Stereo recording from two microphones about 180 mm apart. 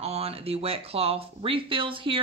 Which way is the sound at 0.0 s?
35° right (ahead or behind).